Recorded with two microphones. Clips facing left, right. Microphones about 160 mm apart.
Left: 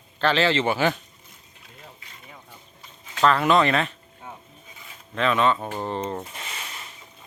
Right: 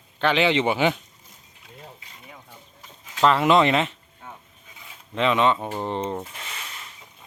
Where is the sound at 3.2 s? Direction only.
20° right (ahead or behind).